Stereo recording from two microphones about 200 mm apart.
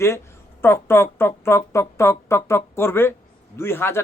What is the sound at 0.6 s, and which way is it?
A man's voice, 10° left (ahead or behind).